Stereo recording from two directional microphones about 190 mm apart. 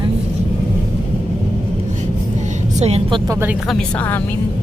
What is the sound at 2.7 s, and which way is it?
Speech, 35° right (ahead or behind).